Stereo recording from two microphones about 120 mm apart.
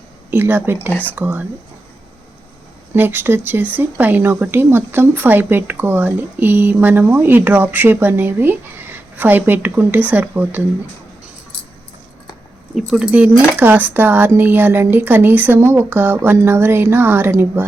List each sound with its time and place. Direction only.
0.3 s speech: 20° right (ahead or behind)
2.9 s speech: 15° right (ahead or behind)
12.7 s speech: 5° right (ahead or behind)